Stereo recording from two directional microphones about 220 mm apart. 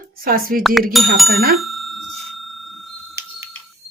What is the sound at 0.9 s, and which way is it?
Speech, centre (ahead or behind).